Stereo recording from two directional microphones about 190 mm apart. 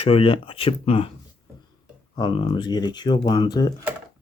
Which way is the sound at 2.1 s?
25° left (ahead or behind).